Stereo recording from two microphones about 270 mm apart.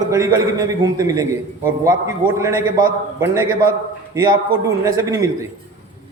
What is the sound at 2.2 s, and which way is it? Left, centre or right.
Speech, right.